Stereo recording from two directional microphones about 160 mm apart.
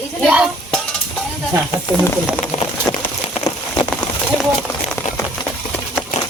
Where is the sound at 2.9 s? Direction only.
25° left (ahead or behind).